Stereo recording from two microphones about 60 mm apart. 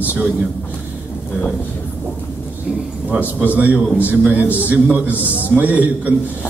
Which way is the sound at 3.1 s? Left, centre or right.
Right.